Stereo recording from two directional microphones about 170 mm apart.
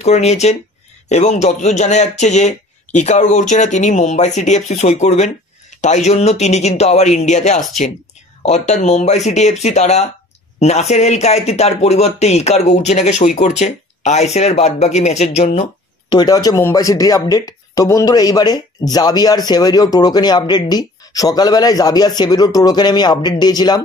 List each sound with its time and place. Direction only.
0.0 s a man's voice: 40° left (ahead or behind)
16.1 s speech: 25° left (ahead or behind)